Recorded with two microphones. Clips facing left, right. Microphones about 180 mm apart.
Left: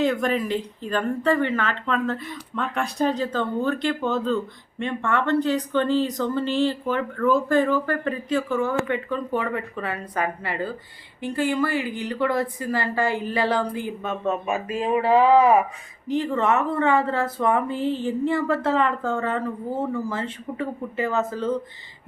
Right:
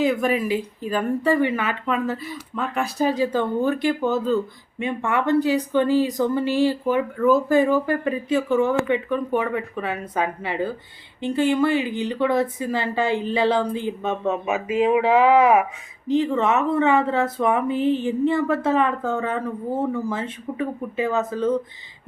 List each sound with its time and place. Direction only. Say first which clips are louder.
0.0 s speech: right 2 dB; 5° right (ahead or behind)